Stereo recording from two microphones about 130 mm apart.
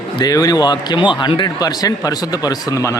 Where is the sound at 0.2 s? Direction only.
30° left (ahead or behind).